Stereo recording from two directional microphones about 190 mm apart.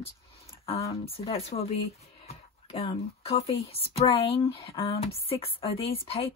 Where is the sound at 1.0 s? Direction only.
30° left (ahead or behind).